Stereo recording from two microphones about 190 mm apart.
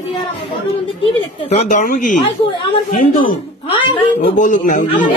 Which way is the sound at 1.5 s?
40° left (ahead or behind).